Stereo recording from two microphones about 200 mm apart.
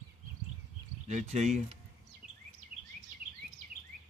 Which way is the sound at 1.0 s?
35° right (ahead or behind).